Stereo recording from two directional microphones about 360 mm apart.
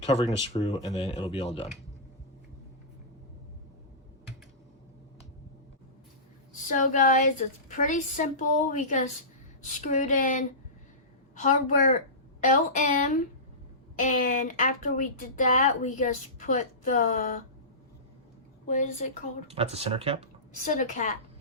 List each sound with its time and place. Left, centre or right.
0.0 s speech: centre
6.7 s a woman's voice: left
18.7 s a woman's voice: centre
19.5 s speech: centre
20.7 s a woman's voice: left